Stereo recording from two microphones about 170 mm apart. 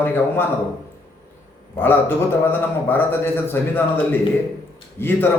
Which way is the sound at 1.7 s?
10° left (ahead or behind).